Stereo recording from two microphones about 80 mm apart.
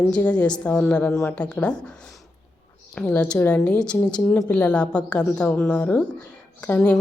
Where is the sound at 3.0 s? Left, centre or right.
Centre.